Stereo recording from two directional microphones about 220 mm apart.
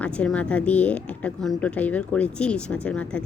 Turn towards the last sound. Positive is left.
turn(degrees=5)  # may be behind; listen again after turning